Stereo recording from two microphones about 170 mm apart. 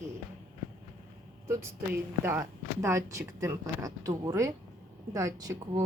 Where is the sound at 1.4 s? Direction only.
15° right (ahead or behind).